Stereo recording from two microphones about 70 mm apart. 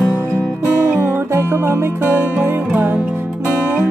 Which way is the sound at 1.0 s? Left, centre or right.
Right.